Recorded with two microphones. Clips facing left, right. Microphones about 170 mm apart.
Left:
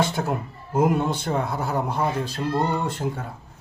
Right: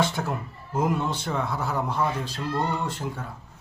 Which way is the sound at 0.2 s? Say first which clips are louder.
Left 4 dB; 30° left (ahead or behind).